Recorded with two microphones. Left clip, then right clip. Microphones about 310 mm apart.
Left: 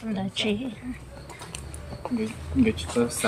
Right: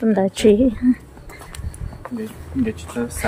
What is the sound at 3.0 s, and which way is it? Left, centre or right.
Speech, centre.